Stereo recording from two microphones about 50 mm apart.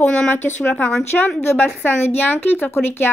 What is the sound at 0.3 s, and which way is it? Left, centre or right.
Speech, left.